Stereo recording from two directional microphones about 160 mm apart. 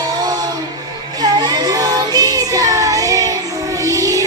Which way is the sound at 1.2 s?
25° right (ahead or behind).